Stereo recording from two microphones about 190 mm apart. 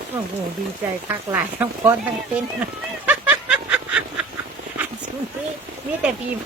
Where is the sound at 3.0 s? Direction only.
5° right (ahead or behind).